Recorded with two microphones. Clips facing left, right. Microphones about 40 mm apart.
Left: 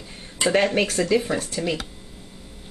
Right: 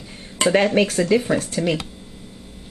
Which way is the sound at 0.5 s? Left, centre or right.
Centre.